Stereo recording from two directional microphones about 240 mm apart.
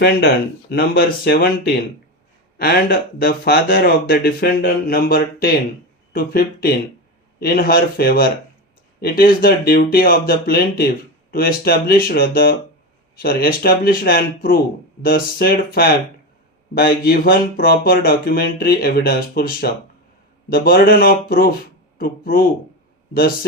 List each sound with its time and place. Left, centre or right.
0.0 s speech: left